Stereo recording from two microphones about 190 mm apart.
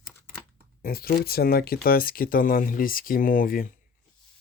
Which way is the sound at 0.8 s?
50° left (ahead or behind).